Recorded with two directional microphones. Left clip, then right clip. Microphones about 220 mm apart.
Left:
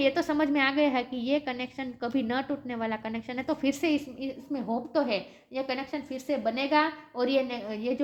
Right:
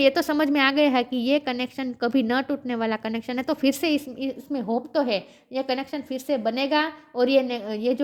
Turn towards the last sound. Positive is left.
turn(degrees=-45)  # may be behind; listen again after turning